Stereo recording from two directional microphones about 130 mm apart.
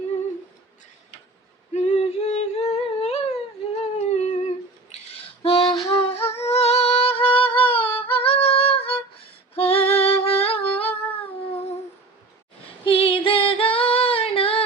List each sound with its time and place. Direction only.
1.7 s humming: 65° left (ahead or behind); by 5.7 s 45° left (ahead or behind)
5.9 s music: 50° left (ahead or behind)
8.1 s female singing: 50° left (ahead or behind)
10.2 s humming: 50° left (ahead or behind)
12.8 s female singing: 45° left (ahead or behind)